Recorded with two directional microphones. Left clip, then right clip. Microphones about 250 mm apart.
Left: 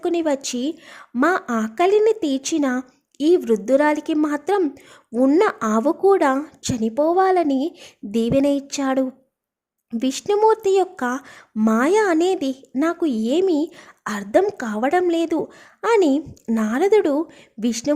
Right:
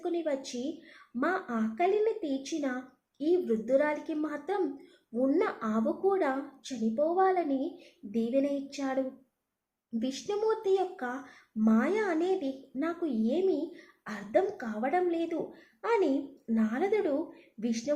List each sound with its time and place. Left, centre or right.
0.0 s a woman's voice: left